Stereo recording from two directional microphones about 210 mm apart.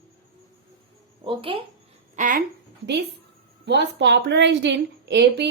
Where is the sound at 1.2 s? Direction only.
25° right (ahead or behind).